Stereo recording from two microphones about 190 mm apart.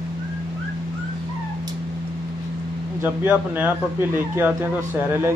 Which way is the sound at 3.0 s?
10° right (ahead or behind).